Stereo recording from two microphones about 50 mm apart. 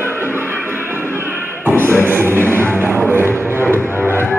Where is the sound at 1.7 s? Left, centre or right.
Right.